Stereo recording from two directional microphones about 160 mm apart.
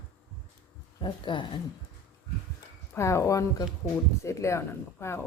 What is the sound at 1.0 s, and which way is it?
Speech, 30° left (ahead or behind).